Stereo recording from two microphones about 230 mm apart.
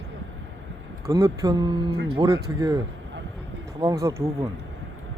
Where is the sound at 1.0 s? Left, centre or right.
Centre.